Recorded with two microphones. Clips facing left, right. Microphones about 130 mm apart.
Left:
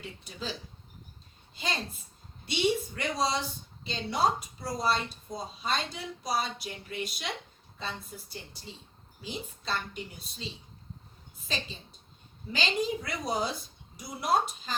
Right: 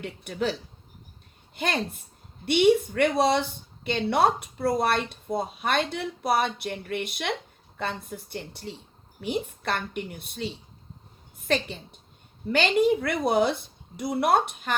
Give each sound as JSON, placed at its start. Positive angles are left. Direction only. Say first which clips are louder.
{"t": 0.0, "sound": "speech", "louder": "right 11 dB", "side_deg": -65}
{"t": 1.5, "sound": "a woman's voice", "louder": "right 7 dB", "side_deg": -60}